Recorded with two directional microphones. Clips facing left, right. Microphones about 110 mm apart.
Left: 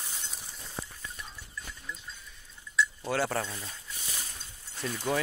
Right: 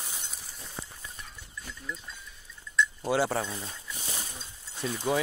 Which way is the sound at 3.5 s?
20° right (ahead or behind).